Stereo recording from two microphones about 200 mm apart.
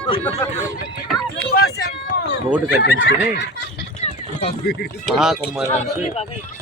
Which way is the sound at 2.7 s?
60° left (ahead or behind).